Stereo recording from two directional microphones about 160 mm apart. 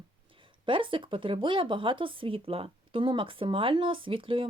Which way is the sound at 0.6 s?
35° right (ahead or behind).